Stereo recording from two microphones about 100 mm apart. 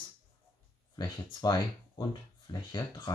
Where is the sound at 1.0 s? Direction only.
45° left (ahead or behind).